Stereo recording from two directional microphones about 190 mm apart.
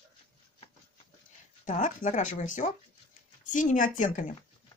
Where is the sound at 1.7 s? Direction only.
40° left (ahead or behind).